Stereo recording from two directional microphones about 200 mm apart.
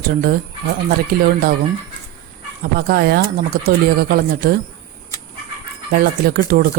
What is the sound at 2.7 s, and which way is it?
Speech, 50° right (ahead or behind).